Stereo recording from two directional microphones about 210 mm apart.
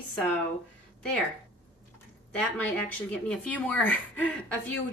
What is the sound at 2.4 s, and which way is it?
A woman's voice, 5° left (ahead or behind).